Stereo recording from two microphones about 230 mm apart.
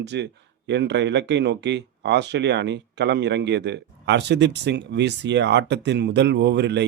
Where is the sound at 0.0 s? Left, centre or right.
Right.